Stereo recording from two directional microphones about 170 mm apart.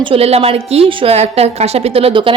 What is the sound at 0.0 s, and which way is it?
A woman's voice, 35° right (ahead or behind).